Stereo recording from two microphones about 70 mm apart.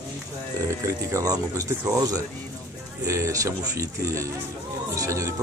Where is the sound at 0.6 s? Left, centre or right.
Right.